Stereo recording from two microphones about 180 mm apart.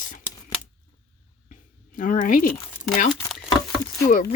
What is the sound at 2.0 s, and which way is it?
Speech, 50° left (ahead or behind).